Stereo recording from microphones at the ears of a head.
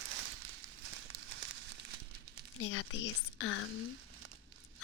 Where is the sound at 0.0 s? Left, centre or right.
Right.